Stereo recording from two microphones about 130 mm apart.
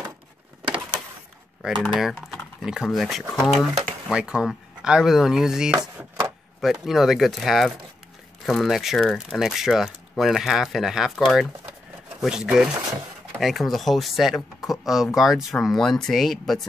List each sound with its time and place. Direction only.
1.6 s speech: 5° right (ahead or behind)
5.9 s a sound: 20° right (ahead or behind)
6.6 s speech: centre (ahead or behind)